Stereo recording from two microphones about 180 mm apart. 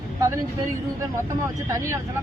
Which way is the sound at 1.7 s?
15° right (ahead or behind).